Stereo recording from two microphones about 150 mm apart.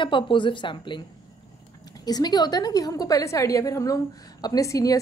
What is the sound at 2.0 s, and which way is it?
A woman's voice, 25° left (ahead or behind).